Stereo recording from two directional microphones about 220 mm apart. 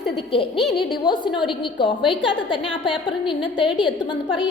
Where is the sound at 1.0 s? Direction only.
20° left (ahead or behind).